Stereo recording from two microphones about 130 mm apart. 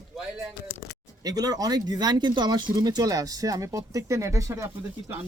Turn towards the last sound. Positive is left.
turn(degrees=-20)  # may be behind; listen again after turning